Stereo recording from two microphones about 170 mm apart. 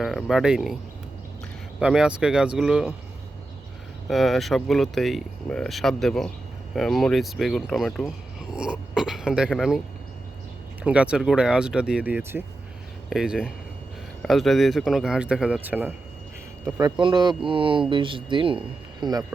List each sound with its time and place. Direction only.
0.0 s speech: centre (ahead or behind)
1.8 s speech: 5° right (ahead or behind)
4.1 s speech: centre (ahead or behind)
10.8 s speech: 5° right (ahead or behind)
17.0 s speech: 25° right (ahead or behind)